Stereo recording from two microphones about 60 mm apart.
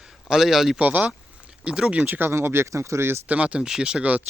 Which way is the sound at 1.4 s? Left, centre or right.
Centre.